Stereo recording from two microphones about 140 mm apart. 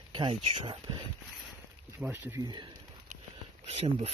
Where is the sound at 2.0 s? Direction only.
15° right (ahead or behind).